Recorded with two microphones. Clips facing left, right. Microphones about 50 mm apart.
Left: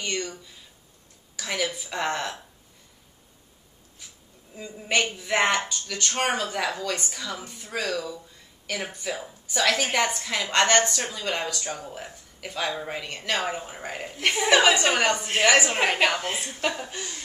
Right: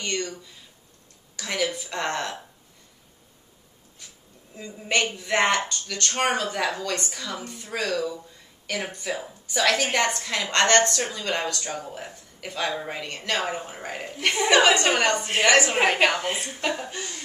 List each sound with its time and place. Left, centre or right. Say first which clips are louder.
0.0 s a woman's voice: right 1 dB; centre
4.6 s a woman's voice: even; centre